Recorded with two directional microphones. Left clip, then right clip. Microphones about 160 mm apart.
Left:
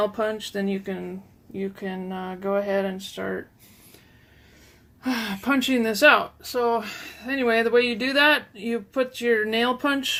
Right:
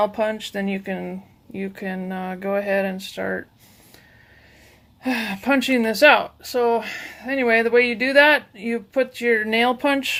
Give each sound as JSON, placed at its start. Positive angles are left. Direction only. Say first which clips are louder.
{"t": 0.0, "sound": "speech", "louder": "right 3 dB", "side_deg": -50}
{"t": 5.0, "sound": "speech", "louder": "right 3 dB", "side_deg": -35}